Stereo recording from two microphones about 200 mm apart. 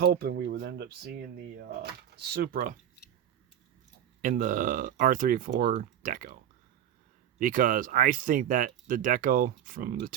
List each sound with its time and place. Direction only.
0.0 s speech: 50° right (ahead or behind)
2.3 s speech: 45° right (ahead or behind)
4.2 s speech: 40° right (ahead or behind)